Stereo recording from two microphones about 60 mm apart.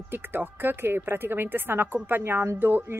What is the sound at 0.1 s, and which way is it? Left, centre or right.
Speech, right.